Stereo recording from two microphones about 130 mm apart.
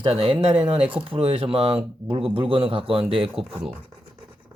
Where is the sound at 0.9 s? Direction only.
45° right (ahead or behind).